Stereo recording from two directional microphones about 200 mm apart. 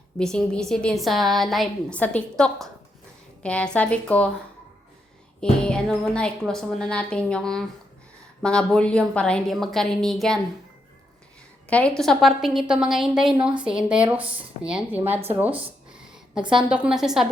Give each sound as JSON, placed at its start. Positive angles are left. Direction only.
{"t": 0.2, "sound": "a woman's voice", "side_deg": 5}
{"t": 5.4, "sound": "a woman's voice", "side_deg": 5}
{"t": 11.7, "sound": "a woman's voice", "side_deg": 5}
{"t": 15.3, "sound": "a sound", "side_deg": -10}
{"t": 16.4, "sound": "a woman's voice", "side_deg": -25}
{"t": 16.6, "sound": "a woman's voice", "side_deg": -5}